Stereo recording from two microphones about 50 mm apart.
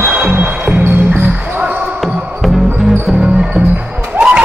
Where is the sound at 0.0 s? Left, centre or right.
Right.